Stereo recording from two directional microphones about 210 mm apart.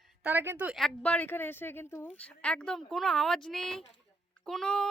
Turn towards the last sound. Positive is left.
turn(degrees=0)  # may be behind; listen again after turning